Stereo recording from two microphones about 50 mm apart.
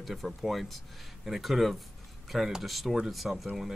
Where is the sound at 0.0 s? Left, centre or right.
Centre.